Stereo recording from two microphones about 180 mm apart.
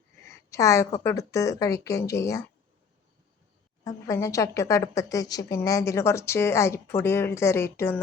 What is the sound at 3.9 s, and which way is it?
A woman's voice, 20° left (ahead or behind).